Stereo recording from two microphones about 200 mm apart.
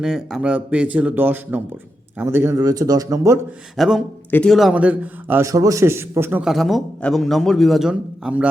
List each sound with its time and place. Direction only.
0.0 s a man's voice: 5° right (ahead or behind)
3.8 s a man's voice: centre (ahead or behind)